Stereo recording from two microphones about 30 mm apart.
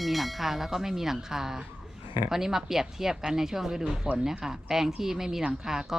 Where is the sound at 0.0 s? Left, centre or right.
Centre.